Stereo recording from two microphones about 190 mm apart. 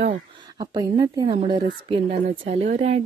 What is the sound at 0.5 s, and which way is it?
Speech, 20° right (ahead or behind).